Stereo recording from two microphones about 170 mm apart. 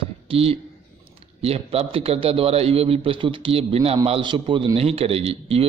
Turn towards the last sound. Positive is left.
turn(degrees=-35)  # may be behind; listen again after turning